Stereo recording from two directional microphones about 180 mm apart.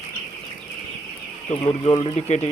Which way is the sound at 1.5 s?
30° left (ahead or behind).